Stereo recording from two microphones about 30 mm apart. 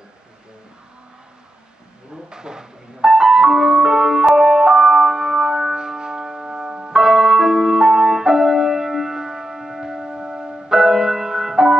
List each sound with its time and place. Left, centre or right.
2.1 s music: right